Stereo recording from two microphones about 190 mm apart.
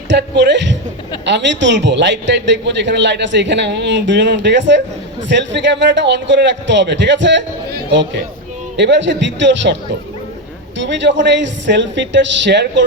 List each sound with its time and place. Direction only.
0.1 s a man's voice: 65° right (ahead or behind)
10.8 s a man's voice: 70° right (ahead or behind)